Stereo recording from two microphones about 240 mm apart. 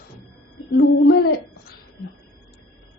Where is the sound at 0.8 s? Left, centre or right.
Left.